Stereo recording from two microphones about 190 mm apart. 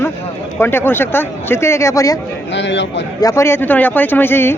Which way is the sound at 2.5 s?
70° left (ahead or behind).